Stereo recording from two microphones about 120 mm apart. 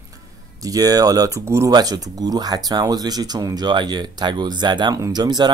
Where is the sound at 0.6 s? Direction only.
30° right (ahead or behind).